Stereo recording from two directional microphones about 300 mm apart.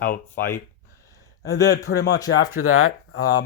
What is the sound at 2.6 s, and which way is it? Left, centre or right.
Speech, left.